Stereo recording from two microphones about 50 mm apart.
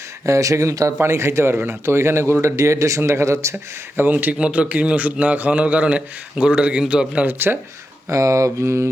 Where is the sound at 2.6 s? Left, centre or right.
Right.